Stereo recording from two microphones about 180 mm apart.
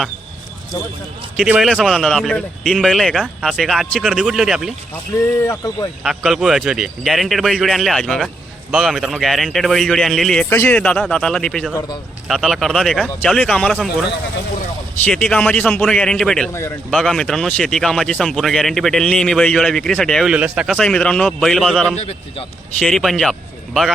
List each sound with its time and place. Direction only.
1.4 s a man's voice: centre (ahead or behind)
5.4 s speech: 15° left (ahead or behind)
6.0 s a man's voice: centre (ahead or behind)
11.7 s speech: 20° left (ahead or behind)
12.3 s a man's voice: centre (ahead or behind)
16.5 s speech: 15° left (ahead or behind)
16.9 s a man's voice: centre (ahead or behind)
20.7 s a man's voice: 5° left (ahead or behind)